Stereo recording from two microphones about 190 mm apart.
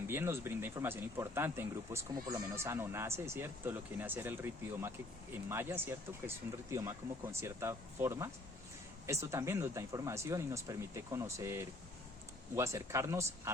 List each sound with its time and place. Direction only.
0.1 s speech: 10° right (ahead or behind)